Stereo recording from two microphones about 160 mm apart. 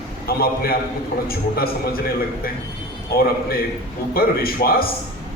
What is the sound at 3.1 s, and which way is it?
A man's voice, 70° left (ahead or behind).